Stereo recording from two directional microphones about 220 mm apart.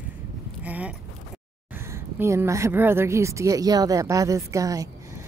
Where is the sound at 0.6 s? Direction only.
5° right (ahead or behind).